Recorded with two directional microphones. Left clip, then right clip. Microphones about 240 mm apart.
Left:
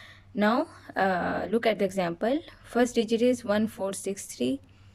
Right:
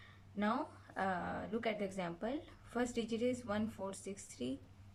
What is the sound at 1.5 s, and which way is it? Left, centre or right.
A woman's voice, left.